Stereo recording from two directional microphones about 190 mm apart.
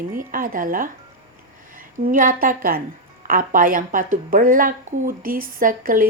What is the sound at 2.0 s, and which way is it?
A woman's voice, 45° right (ahead or behind).